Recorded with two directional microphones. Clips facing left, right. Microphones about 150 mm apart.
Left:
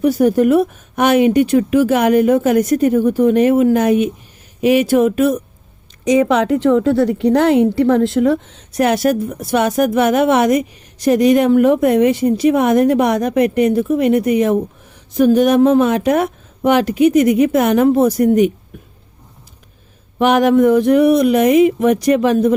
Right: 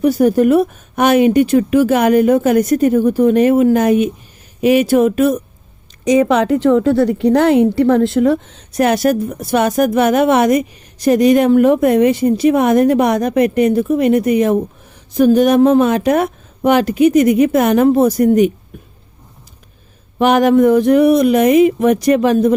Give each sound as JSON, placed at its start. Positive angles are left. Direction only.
{"t": 0.0, "sound": "speech", "side_deg": -40}
{"t": 20.1, "sound": "speech", "side_deg": -40}